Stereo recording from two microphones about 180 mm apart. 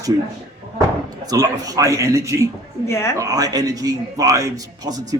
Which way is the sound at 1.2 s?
20° right (ahead or behind).